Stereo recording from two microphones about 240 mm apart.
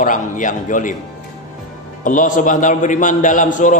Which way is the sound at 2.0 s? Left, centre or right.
Left.